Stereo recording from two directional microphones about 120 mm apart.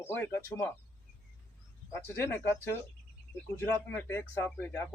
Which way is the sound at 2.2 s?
20° left (ahead or behind).